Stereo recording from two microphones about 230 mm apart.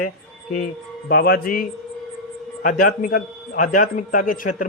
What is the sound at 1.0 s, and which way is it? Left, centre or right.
Speech, left.